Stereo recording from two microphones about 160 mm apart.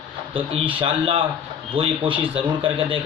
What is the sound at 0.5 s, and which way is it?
A man's voice, 30° right (ahead or behind).